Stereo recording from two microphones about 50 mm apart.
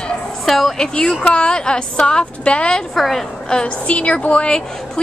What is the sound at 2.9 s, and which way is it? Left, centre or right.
Speech, centre.